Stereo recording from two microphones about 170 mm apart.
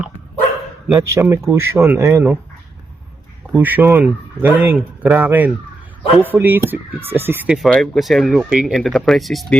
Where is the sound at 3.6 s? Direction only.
10° right (ahead or behind).